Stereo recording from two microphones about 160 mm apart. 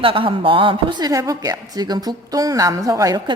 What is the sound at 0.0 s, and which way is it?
Speech, 35° right (ahead or behind).